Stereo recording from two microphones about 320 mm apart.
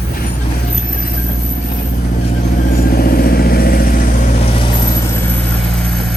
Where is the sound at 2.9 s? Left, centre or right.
Left.